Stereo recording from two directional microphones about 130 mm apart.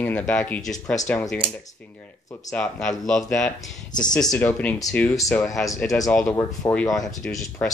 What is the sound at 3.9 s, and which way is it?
Speech, 75° left (ahead or behind).